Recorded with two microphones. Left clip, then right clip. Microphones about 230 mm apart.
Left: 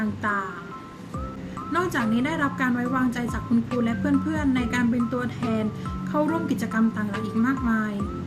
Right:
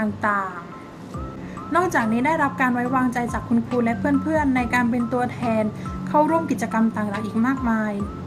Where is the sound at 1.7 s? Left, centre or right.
Centre.